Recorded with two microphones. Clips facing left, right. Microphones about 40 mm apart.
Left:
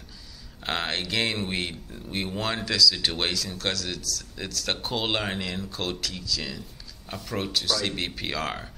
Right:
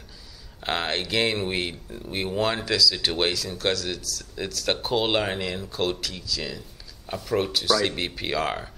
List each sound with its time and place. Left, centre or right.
0.6 s speech: centre